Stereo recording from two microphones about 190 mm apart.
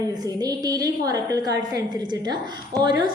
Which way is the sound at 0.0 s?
20° right (ahead or behind).